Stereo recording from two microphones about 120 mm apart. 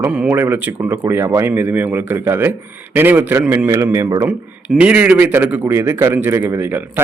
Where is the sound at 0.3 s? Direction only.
15° right (ahead or behind).